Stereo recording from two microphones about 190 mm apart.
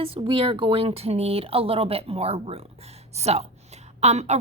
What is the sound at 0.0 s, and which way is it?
A woman's voice, 25° right (ahead or behind).